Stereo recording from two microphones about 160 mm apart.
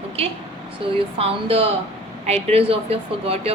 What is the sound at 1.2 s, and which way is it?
A woman's voice, 35° right (ahead or behind).